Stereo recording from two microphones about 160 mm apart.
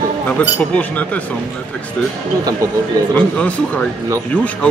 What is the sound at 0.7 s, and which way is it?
Speech, 10° left (ahead or behind).